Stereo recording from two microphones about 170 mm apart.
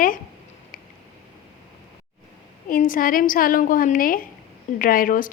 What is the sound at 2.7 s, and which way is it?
A woman's voice, 55° left (ahead or behind).